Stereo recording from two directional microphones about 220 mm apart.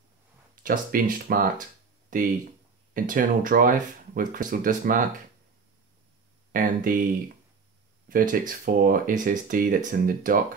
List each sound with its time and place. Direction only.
0.7 s speech: 40° right (ahead or behind)
2.9 s speech: 40° right (ahead or behind)
6.5 s speech: 40° right (ahead or behind)
8.1 s speech: 40° right (ahead or behind)